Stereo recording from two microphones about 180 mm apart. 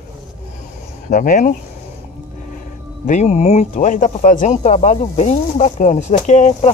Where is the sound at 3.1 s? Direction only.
35° left (ahead or behind).